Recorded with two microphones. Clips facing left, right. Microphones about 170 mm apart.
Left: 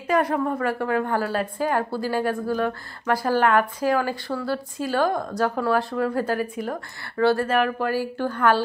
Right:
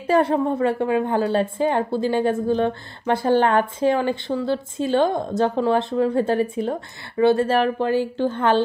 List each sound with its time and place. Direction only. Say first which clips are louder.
0.0 s a woman's voice: right 4 dB; 30° right (ahead or behind)